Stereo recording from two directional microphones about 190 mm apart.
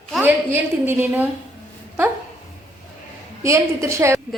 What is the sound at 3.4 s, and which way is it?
Speech, 15° right (ahead or behind).